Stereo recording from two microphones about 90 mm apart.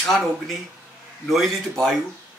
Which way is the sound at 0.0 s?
Centre (ahead or behind).